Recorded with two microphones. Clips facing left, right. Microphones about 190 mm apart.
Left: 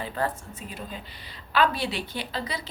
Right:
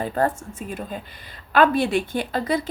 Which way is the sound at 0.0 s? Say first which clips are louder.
Right 7 dB; 45° right (ahead or behind).